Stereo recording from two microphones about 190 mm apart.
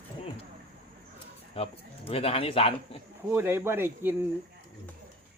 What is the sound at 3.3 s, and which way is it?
Speech, 10° right (ahead or behind).